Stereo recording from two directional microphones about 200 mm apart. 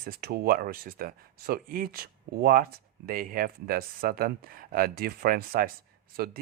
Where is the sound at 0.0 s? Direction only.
50° right (ahead or behind).